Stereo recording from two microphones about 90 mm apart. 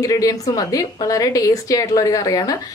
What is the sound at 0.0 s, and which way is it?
A woman's voice, 40° left (ahead or behind).